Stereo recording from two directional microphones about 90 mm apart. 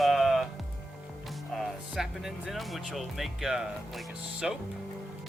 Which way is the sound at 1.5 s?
5° right (ahead or behind).